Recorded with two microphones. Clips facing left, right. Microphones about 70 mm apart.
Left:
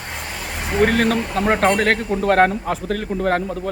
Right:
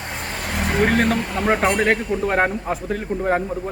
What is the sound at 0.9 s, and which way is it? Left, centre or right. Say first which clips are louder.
Speech: even; right.